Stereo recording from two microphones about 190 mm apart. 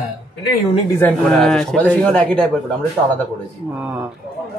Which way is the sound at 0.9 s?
5° left (ahead or behind).